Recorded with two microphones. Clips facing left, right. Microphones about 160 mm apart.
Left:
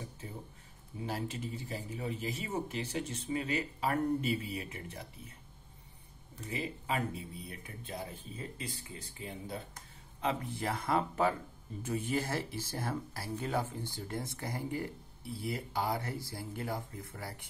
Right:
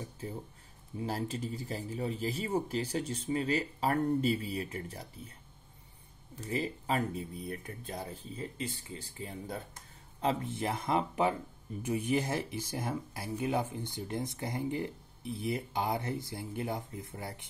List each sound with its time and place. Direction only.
1.0 s a man's voice: 35° right (ahead or behind)
6.4 s a man's voice: 35° right (ahead or behind); by 17.5 s 20° right (ahead or behind)